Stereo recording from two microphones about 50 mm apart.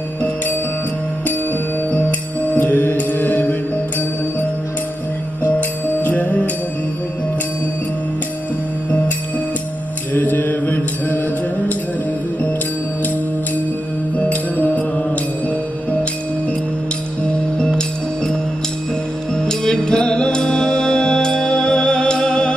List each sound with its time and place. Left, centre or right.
1.9 s mantra: left
5.6 s music: left
10.1 s mantra: left
14.1 s music: left
17.7 s music: centre